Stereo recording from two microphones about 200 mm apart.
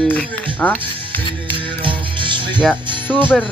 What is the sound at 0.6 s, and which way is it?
Speech, 10° left (ahead or behind).